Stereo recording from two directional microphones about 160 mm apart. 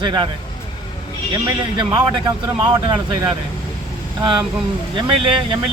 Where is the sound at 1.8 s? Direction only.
25° right (ahead or behind).